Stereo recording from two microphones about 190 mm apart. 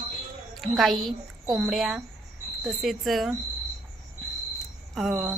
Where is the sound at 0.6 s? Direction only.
Centre (ahead or behind).